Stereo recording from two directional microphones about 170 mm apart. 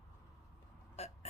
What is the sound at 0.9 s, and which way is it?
Hiccup, 40° left (ahead or behind).